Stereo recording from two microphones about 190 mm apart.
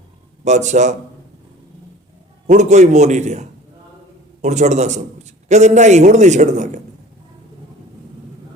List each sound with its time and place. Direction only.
0.4 s a man's voice: 40° right (ahead or behind)
2.5 s a man's voice: 40° right (ahead or behind)